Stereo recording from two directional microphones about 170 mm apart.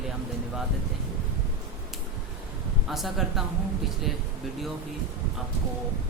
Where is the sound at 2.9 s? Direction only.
Centre (ahead or behind).